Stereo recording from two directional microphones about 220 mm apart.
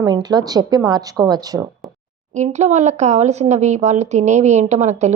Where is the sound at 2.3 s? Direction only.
30° right (ahead or behind).